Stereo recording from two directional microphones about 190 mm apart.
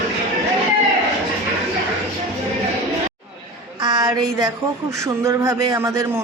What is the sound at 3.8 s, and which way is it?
A woman's voice, 20° right (ahead or behind).